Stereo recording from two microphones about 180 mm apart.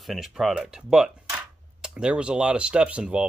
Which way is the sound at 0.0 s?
Centre (ahead or behind).